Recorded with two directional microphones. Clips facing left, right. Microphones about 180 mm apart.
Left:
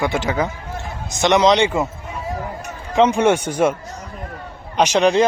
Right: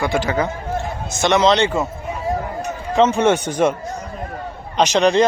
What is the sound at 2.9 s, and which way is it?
Speech, 15° left (ahead or behind).